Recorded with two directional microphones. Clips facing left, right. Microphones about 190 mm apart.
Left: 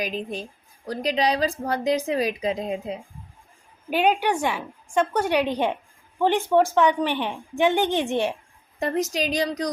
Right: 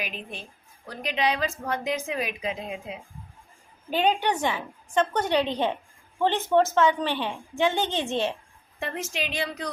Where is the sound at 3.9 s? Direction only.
10° left (ahead or behind).